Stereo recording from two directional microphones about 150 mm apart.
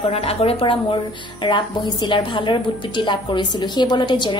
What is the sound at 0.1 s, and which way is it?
A woman's voice, 40° left (ahead or behind).